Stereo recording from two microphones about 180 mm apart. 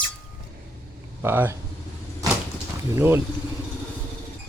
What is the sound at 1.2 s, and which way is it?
Speech, 15° right (ahead or behind).